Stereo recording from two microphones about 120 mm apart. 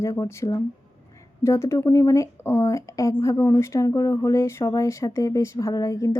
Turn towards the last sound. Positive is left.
turn(degrees=30)  # may be behind; listen again after turning